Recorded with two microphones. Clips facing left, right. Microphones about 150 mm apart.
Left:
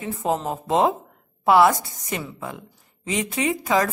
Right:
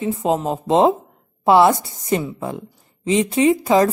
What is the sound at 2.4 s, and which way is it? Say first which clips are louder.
Speech: right 7 dB; 30° right (ahead or behind).